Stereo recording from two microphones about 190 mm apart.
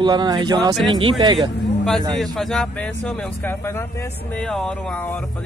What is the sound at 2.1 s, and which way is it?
A man's voice, centre (ahead or behind).